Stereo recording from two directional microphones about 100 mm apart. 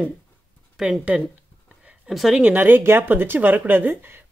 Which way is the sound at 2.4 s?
20° right (ahead or behind).